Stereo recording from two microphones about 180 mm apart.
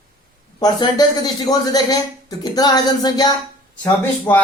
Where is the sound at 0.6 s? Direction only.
20° left (ahead or behind).